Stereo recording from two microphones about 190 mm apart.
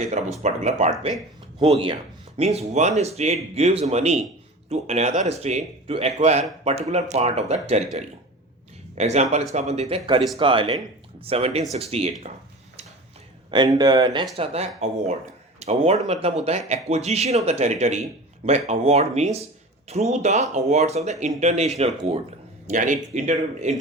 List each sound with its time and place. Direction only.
0.0 s speech: 35° right (ahead or behind)
9.0 s speech: 35° right (ahead or behind)
13.5 s speech: 20° right (ahead or behind)